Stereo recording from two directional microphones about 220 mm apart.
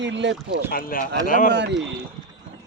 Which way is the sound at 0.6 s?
40° left (ahead or behind).